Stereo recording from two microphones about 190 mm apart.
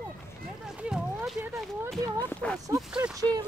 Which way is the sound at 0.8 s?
5° right (ahead or behind).